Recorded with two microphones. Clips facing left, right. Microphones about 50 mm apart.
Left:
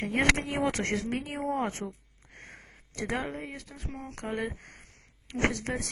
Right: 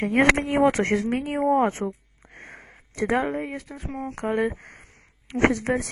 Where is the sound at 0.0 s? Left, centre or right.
Centre.